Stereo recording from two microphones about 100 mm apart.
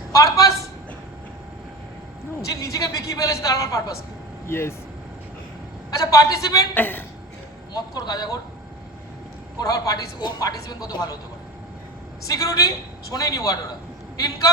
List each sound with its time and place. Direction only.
0.1 s a man's voice: 35° left (ahead or behind)
2.4 s a man's voice: 35° left (ahead or behind)
4.4 s speech: 25° left (ahead or behind)
5.9 s a man's voice: 35° left (ahead or behind)
6.7 s a woman's voice: 20° left (ahead or behind)
7.8 s a man's voice: 40° left (ahead or behind)
9.6 s a man's voice: 35° left (ahead or behind)
12.3 s a man's voice: 35° left (ahead or behind)